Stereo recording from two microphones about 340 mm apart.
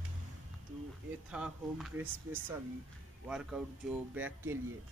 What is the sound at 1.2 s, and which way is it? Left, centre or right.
Speech, centre.